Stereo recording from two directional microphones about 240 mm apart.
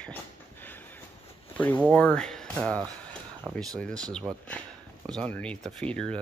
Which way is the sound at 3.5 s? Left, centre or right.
Centre.